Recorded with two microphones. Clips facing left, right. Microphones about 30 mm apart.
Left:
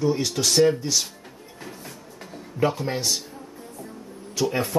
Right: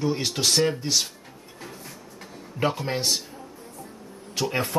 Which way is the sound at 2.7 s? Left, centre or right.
Centre.